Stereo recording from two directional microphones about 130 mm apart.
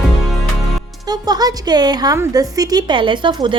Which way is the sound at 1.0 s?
30° right (ahead or behind).